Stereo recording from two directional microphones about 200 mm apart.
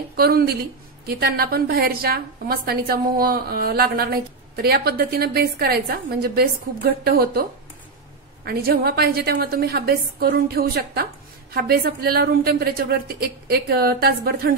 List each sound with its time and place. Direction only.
0.1 s a woman's voice: 50° right (ahead or behind)
8.5 s a woman's voice: 50° right (ahead or behind)